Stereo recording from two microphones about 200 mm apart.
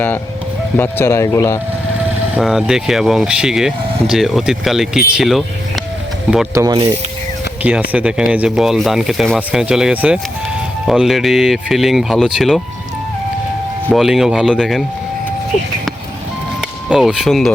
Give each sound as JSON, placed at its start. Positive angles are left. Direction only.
{"t": 0.8, "sound": "speech", "side_deg": 10}
{"t": 2.3, "sound": "speech", "side_deg": 0}
{"t": 6.5, "sound": "speech", "side_deg": -15}
{"t": 13.9, "sound": "speech", "side_deg": 0}
{"t": 16.6, "sound": "speech", "side_deg": -5}